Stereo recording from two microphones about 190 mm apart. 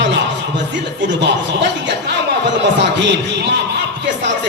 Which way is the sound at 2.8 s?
65° right (ahead or behind).